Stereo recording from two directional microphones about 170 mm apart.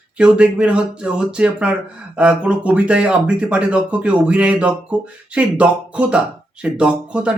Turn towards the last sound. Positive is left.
turn(degrees=-5)  # may be behind; listen again after turning